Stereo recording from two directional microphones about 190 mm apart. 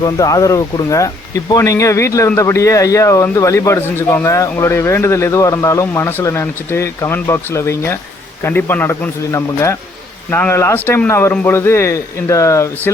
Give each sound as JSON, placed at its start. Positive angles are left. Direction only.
{"t": 0.0, "sound": "a man's voice", "side_deg": 20}